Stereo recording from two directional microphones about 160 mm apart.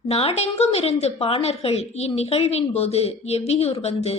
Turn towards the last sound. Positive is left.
turn(degrees=40)  # may be behind; listen again after turning